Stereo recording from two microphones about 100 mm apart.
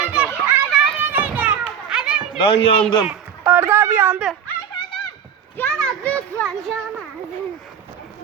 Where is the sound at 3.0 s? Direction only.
20° right (ahead or behind).